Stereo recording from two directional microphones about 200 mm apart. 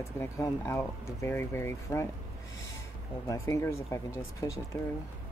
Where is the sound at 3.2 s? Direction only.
15° left (ahead or behind).